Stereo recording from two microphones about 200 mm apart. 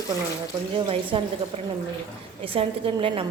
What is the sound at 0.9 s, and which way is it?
Speech, 25° right (ahead or behind).